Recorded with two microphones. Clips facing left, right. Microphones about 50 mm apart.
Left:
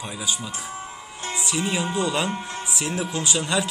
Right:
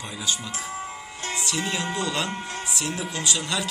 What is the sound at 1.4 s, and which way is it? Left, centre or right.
Speech, centre.